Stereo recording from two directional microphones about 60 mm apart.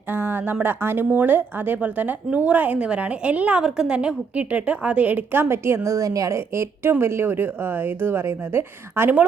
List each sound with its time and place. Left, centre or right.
0.1 s a sound: right
0.6 s a woman's voice: right
5.8 s a woman's voice: right
6.5 s a woman's voice: right